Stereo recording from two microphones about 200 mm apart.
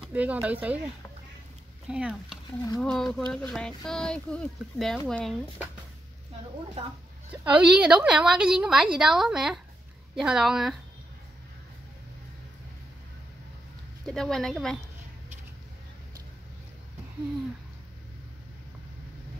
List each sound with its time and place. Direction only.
0.1 s speech: 5° right (ahead or behind)
1.9 s a woman's voice: 5° right (ahead or behind)
6.8 s a woman's voice: 30° right (ahead or behind)
7.4 s a woman's voice: 5° right (ahead or behind)
14.0 s a woman's voice: centre (ahead or behind)